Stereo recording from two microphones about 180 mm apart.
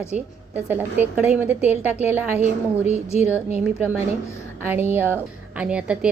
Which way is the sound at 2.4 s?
40° left (ahead or behind).